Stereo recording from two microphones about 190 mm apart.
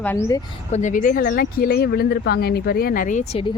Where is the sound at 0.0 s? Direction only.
10° left (ahead or behind).